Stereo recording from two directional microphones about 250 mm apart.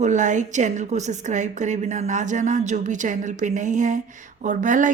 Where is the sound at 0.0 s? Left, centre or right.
Right.